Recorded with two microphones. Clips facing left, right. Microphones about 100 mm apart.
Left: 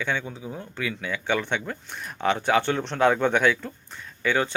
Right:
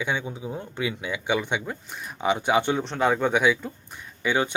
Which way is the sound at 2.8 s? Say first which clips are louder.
Left 2 dB; 5° right (ahead or behind).